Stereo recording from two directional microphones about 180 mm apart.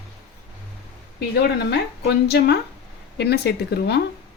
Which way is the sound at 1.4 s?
65° left (ahead or behind).